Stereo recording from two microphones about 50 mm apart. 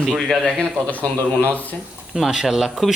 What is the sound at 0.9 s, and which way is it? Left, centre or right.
Speech, left.